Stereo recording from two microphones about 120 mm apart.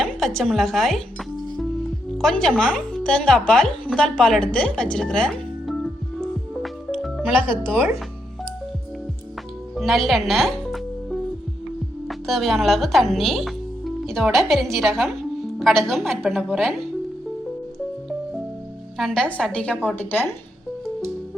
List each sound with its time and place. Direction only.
0.0 s speech: 5° left (ahead or behind)
6.9 s music: 5° right (ahead or behind)
7.4 s speech: 45° left (ahead or behind)
9.7 s music: centre (ahead or behind)
12.0 s a woman's voice: centre (ahead or behind)
18.9 s speech: 5° left (ahead or behind)